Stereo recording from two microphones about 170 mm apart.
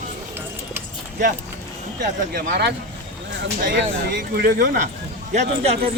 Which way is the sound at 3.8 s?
90° right.